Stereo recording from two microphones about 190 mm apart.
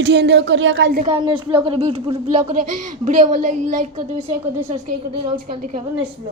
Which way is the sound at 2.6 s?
40° right (ahead or behind).